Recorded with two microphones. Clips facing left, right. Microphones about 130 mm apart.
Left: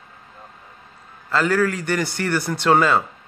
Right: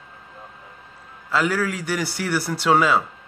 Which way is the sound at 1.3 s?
5° right (ahead or behind).